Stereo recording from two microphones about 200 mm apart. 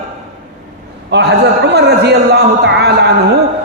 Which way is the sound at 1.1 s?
60° right (ahead or behind).